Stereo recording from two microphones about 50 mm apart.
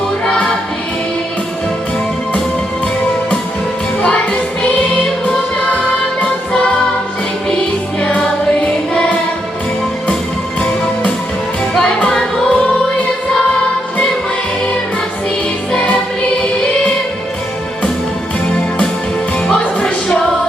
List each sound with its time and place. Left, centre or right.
4.0 s music: left
6.1 s music: centre
8.5 s music: left
10.6 s music: left
15.7 s music: centre
19.5 s music: centre